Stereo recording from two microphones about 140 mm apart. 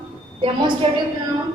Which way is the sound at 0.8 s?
40° right (ahead or behind).